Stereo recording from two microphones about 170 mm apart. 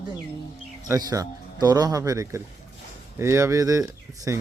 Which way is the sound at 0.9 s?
20° right (ahead or behind).